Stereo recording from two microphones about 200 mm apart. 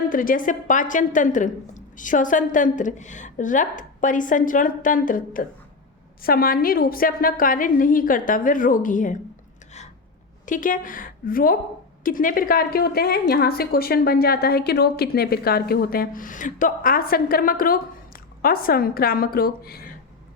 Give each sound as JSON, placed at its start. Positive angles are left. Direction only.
{"t": 0.1, "sound": "a woman's voice", "side_deg": 45}
{"t": 10.4, "sound": "a woman's voice", "side_deg": 40}